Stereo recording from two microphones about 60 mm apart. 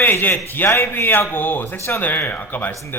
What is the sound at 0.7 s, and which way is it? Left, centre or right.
Speech, left.